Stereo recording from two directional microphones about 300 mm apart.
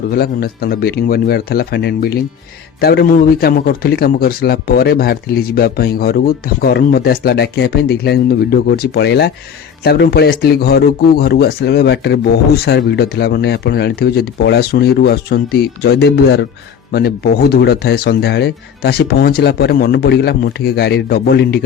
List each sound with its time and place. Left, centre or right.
0.1 s speech: left
17.5 s speech: left